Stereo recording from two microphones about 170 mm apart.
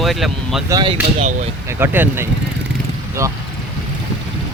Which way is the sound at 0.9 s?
45° right (ahead or behind).